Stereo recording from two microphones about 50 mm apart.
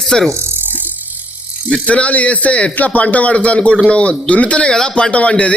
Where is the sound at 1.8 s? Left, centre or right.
Left.